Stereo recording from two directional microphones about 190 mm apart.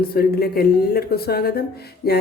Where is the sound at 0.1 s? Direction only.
55° left (ahead or behind).